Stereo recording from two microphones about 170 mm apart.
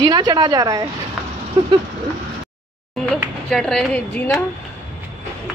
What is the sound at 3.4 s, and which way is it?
Speech, 5° left (ahead or behind).